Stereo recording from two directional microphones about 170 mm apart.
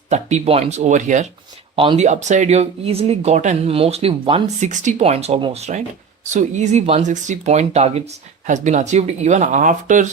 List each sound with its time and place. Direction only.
0.1 s speech: 40° right (ahead or behind)
1.7 s speech: 30° right (ahead or behind)
2.0 s speech: 45° right (ahead or behind)
4.6 s speech: 45° right (ahead or behind)